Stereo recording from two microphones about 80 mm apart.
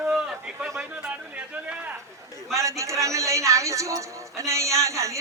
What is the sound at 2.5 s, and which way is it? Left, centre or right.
A man's voice, right.